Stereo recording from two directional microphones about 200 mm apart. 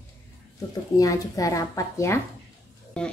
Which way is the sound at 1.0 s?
15° left (ahead or behind).